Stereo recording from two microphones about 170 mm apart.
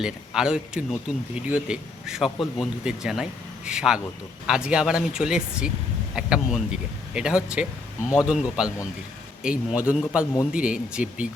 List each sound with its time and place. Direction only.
0.0 s speech: 5° right (ahead or behind)